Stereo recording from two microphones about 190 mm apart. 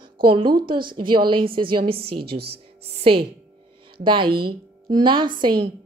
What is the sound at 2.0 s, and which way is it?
Speech, 55° right (ahead or behind).